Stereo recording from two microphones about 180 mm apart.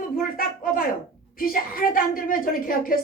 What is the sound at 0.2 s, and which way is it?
A woman's voice, 50° left (ahead or behind).